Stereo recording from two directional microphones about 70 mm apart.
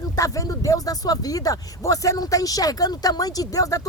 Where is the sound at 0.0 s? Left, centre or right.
Left.